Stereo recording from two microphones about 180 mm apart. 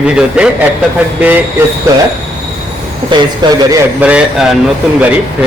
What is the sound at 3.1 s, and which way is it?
Speech, 25° right (ahead or behind).